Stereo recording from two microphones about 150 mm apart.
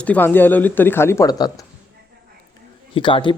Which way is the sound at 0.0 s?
10° left (ahead or behind).